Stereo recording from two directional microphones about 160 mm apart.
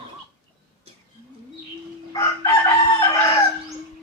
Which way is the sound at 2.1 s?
20° left (ahead or behind).